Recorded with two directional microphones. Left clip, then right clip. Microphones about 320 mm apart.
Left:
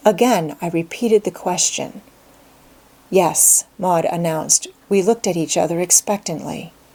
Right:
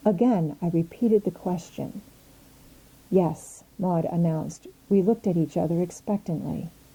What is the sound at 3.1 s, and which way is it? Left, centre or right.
A woman's voice, centre.